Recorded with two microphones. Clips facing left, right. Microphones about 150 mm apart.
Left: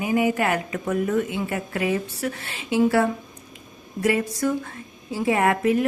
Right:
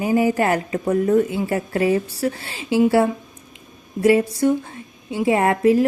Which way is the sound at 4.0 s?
30° right (ahead or behind).